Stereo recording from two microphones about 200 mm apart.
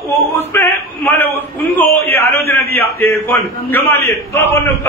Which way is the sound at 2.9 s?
15° left (ahead or behind).